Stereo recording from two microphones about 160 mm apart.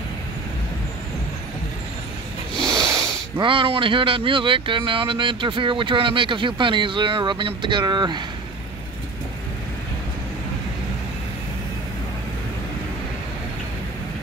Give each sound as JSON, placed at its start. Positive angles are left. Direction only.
{"t": 2.7, "sound": "snort", "side_deg": -20}
{"t": 3.3, "sound": "speech", "side_deg": -30}